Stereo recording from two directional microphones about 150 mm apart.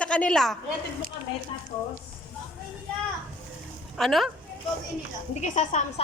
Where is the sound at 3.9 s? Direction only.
Centre (ahead or behind).